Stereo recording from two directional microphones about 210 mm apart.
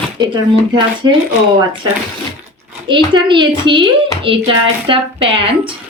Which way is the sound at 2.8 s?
20° right (ahead or behind).